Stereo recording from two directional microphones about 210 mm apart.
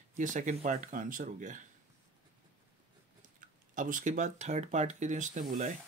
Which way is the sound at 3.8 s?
40° right (ahead or behind).